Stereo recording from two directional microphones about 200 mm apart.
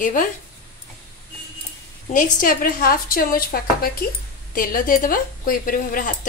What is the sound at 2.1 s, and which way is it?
A woman's voice, 45° left (ahead or behind).